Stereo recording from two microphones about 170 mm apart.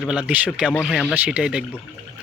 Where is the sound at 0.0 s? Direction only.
5° right (ahead or behind).